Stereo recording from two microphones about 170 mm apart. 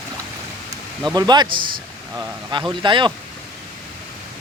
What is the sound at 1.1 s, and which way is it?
Speech, 25° right (ahead or behind).